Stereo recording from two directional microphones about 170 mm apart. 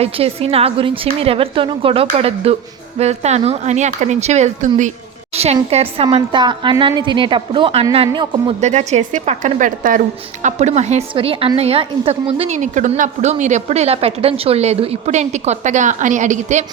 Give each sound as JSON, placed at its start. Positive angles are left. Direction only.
{"t": 0.0, "sound": "a woman's voice", "side_deg": -35}
{"t": 5.3, "sound": "a sound", "side_deg": -35}
{"t": 5.7, "sound": "a woman's voice", "side_deg": -35}
{"t": 8.6, "sound": "a woman's voice", "side_deg": -40}